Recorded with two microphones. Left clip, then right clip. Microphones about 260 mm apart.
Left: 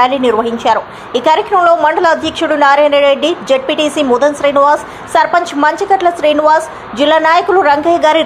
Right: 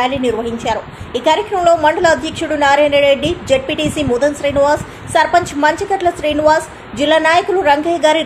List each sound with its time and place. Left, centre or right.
0.0 s a woman's voice: centre